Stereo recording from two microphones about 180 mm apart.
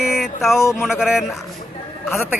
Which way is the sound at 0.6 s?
15° left (ahead or behind).